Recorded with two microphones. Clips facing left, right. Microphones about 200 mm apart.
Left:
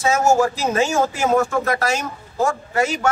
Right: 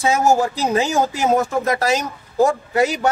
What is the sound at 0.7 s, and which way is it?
A man's voice, 20° right (ahead or behind).